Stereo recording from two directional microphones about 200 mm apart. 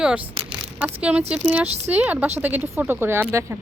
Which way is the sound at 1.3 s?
5° right (ahead or behind).